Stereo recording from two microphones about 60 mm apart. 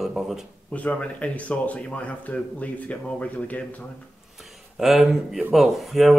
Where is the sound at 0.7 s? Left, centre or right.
Left.